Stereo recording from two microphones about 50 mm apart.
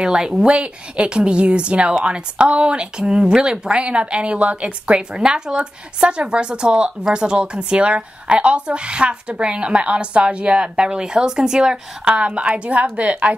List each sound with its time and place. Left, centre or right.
0.0 s speech: centre
5.1 s speech: centre